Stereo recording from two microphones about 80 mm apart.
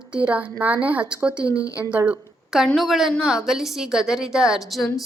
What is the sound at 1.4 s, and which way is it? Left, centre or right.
Speech, left.